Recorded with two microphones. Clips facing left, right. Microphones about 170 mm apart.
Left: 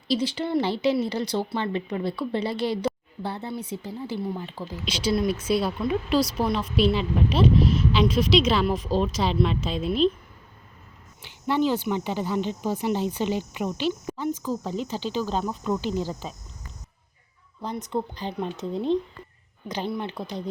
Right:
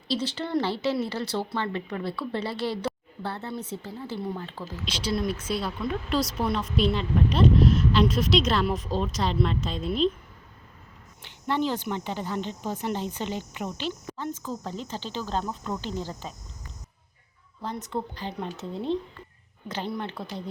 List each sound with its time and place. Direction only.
0.1 s a woman's voice: 10° left (ahead or behind)
11.2 s speech: 5° left (ahead or behind)
17.6 s speech: 15° left (ahead or behind)